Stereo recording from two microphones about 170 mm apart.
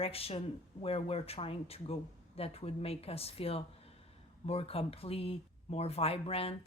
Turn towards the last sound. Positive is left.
turn(degrees=35)  # may be behind; listen again after turning